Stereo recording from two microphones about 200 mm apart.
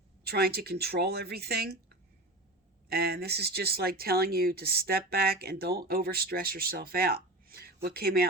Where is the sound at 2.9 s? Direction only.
55° right (ahead or behind).